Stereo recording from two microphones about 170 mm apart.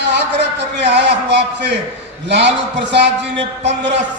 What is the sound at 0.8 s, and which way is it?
A man's voice, 80° right.